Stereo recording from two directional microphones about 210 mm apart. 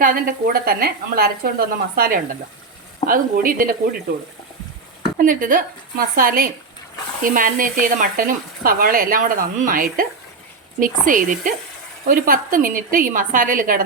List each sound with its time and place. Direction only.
0.0 s speech: 40° right (ahead or behind)
5.1 s speech: 40° right (ahead or behind)